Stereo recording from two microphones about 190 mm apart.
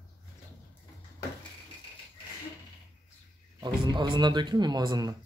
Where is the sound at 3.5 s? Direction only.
25° right (ahead or behind).